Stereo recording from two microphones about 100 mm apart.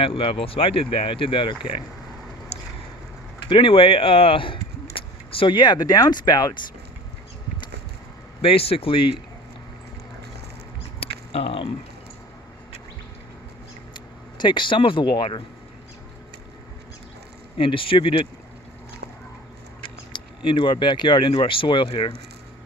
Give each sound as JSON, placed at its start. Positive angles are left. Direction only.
{"t": 0.0, "sound": "speech", "side_deg": 65}
{"t": 3.5, "sound": "speech", "side_deg": 60}
{"t": 8.4, "sound": "speech", "side_deg": 75}
{"t": 11.0, "sound": "a sound", "side_deg": 75}
{"t": 13.9, "sound": "speech", "side_deg": 50}
{"t": 17.6, "sound": "speech", "side_deg": 60}
{"t": 19.8, "sound": "speech", "side_deg": 55}